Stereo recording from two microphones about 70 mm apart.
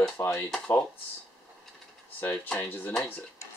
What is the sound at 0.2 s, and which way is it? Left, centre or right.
Speech, left.